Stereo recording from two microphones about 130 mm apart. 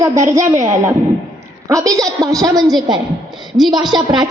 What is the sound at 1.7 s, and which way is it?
A woman's voice, 25° right (ahead or behind).